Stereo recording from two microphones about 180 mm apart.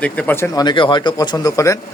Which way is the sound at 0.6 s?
25° left (ahead or behind).